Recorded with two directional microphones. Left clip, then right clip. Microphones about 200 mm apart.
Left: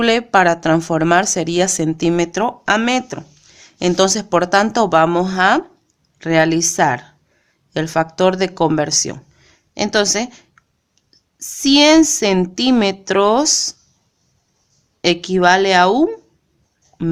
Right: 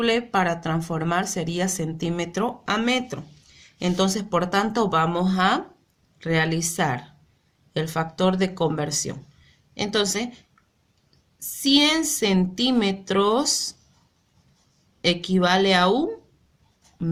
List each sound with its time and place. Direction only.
0.0 s a woman's voice: 40° left (ahead or behind)
15.0 s speech: 35° left (ahead or behind)